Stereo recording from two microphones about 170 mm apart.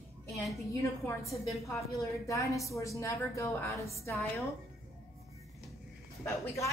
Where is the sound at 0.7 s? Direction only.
20° left (ahead or behind).